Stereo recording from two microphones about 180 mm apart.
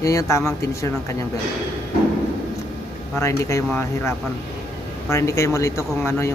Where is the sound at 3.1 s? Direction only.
15° left (ahead or behind).